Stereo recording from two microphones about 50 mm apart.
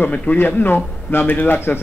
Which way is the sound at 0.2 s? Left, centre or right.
Left.